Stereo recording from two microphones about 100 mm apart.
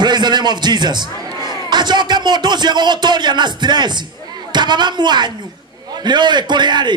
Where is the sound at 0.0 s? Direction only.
45° right (ahead or behind).